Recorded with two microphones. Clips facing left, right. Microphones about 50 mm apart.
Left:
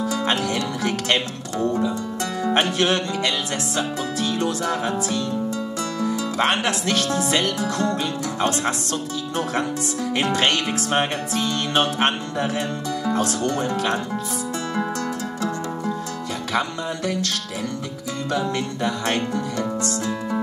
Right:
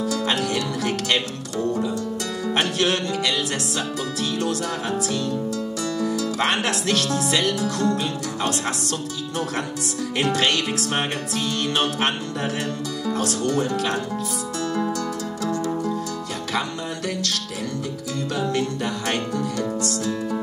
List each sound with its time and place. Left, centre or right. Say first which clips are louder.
0.0 s music: left 1 dB; left
10.1 s music: even; left
16.5 s music: left 3 dB; left
18.5 s music: even; left